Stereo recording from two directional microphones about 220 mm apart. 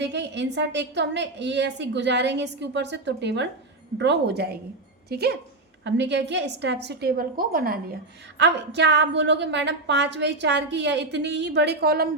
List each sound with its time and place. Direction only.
0.0 s a woman's voice: 50° right (ahead or behind)